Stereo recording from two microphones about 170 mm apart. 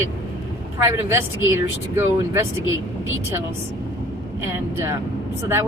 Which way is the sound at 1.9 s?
15° right (ahead or behind).